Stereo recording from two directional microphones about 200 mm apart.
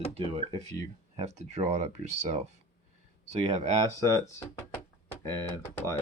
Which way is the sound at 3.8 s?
15° left (ahead or behind).